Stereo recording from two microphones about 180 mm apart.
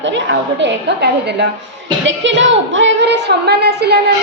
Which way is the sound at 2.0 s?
90° right.